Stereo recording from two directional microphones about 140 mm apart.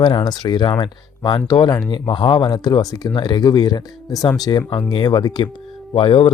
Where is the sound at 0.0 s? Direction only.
30° left (ahead or behind).